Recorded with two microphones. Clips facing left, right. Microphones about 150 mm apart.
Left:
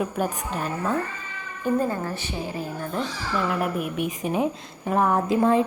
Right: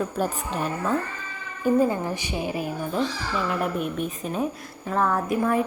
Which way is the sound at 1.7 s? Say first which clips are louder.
Right 3 dB; 15° right (ahead or behind).